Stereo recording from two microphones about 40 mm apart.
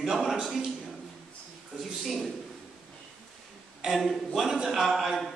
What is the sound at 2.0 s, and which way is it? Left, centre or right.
Speech, centre.